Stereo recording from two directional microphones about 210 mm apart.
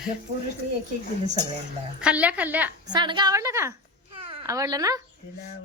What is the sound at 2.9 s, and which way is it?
Speech, 20° right (ahead or behind).